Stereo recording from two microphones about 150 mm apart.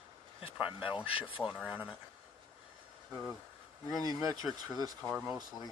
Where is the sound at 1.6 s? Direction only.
5° right (ahead or behind).